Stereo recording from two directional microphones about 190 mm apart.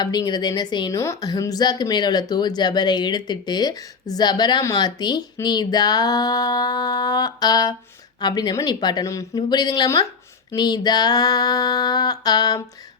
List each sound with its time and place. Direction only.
0.0 s a woman's voice: 20° left (ahead or behind)